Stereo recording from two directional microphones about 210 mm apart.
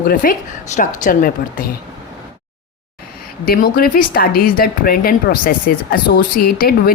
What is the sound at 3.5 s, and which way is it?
Speech, 45° left (ahead or behind).